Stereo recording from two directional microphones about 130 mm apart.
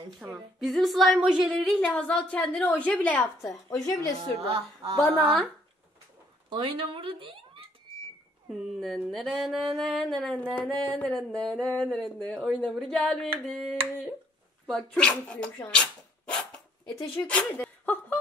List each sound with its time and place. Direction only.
0.2 s a sound: centre (ahead or behind)
1.7 s a woman's voice: 10° left (ahead or behind)
3.6 s a woman's voice: 30° left (ahead or behind)
4.2 s a woman's voice: 50° right (ahead or behind)
6.5 s speech: 45° right (ahead or behind)
8.5 s a sound: centre (ahead or behind)
14.7 s speech: 5° left (ahead or behind)